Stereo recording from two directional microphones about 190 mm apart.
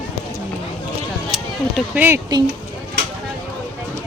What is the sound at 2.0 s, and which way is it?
Speech, 15° right (ahead or behind).